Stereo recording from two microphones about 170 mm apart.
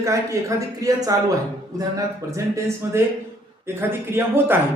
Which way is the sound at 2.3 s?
15° right (ahead or behind).